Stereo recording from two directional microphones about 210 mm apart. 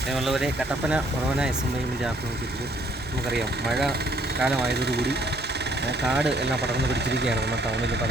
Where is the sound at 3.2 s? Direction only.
50° right (ahead or behind).